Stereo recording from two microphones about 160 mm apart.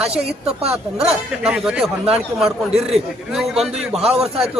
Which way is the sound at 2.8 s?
5° right (ahead or behind).